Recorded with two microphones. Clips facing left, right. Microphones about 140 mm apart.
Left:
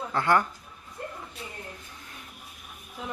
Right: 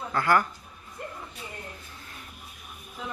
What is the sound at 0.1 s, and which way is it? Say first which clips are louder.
Speech: even; 25° left (ahead or behind).